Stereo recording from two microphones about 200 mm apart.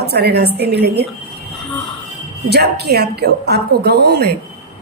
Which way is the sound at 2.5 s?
55° right (ahead or behind).